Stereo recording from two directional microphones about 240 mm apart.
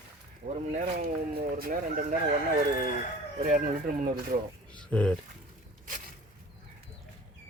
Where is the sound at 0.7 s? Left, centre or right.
Right.